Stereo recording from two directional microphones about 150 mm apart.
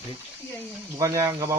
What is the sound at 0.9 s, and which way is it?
Speech, 20° right (ahead or behind).